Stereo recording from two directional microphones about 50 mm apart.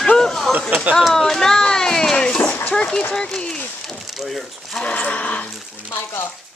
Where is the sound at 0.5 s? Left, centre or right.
Right.